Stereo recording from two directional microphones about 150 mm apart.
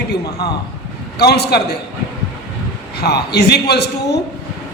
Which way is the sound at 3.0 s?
90° left.